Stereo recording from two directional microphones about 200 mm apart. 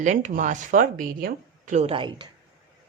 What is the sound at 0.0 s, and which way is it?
Speech, 40° right (ahead or behind).